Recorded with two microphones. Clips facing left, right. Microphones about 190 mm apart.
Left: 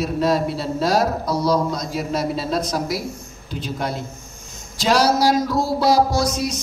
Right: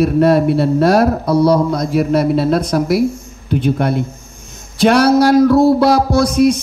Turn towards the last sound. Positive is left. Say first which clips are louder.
# right 10 dB
turn(degrees=-60)  # may be behind; listen again after turning